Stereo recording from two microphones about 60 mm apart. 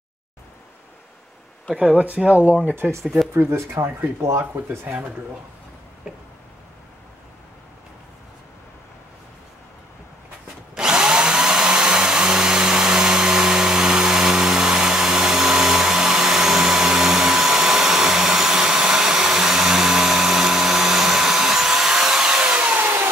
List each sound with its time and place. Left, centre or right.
2.0 s speech: right
3.0 s speech: centre
3.3 s speech: right
4.4 s speech: right
6.0 s a sound: centre
10.7 s a sound: centre